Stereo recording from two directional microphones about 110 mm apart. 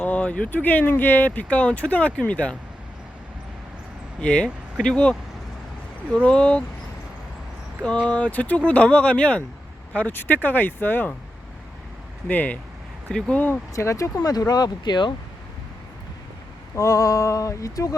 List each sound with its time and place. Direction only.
0.0 s speech: 10° left (ahead or behind)
4.2 s speech: 10° left (ahead or behind)
6.2 s speech: 10° left (ahead or behind)
8.0 s speech: 10° left (ahead or behind)
12.3 s speech: 15° left (ahead or behind)
13.7 s speech: 30° left (ahead or behind)
16.7 s speech: 30° left (ahead or behind)